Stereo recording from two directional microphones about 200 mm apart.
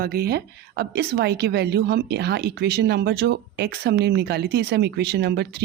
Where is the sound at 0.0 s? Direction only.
50° right (ahead or behind).